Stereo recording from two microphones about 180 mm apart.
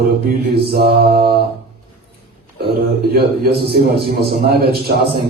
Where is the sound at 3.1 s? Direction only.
60° right (ahead or behind).